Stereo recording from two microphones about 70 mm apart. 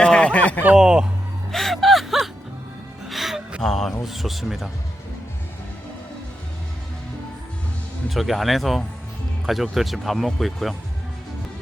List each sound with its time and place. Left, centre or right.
0.0 s a sound: centre
0.8 s speech: centre
1.5 s music: centre
3.6 s speech: centre
8.1 s speech: centre